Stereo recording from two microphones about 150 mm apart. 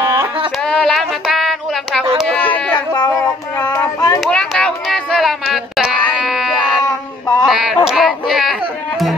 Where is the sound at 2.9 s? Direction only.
25° left (ahead or behind).